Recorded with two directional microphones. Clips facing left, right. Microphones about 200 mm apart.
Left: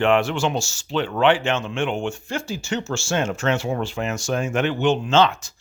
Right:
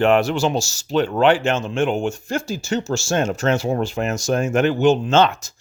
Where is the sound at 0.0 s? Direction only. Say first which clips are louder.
Right 3 dB; 40° right (ahead or behind).